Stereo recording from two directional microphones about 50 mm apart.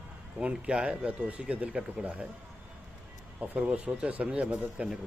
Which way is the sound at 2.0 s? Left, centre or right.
Right.